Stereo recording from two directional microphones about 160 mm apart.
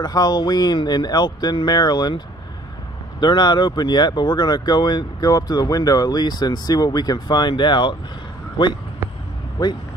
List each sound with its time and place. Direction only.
0.0 s speech: 25° left (ahead or behind)